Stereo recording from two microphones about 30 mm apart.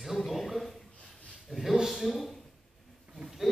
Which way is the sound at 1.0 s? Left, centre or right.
Left.